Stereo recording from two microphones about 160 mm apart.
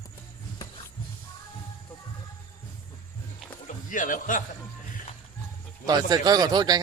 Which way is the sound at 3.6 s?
55° left (ahead or behind).